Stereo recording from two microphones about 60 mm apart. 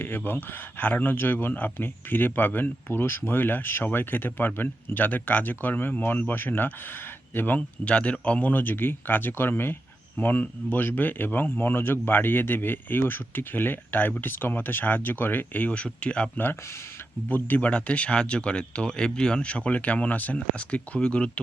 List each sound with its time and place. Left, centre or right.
0.0 s speech: left
7.9 s speech: centre; by 9.7 s left
10.2 s speech: left
17.2 s speech: left
17.7 s speech: left